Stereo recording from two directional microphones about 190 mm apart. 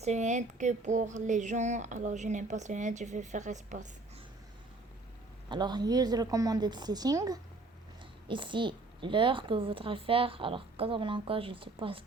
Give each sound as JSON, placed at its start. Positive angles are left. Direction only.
{"t": 0.0, "sound": "speech", "side_deg": -35}
{"t": 5.5, "sound": "a woman's voice", "side_deg": -20}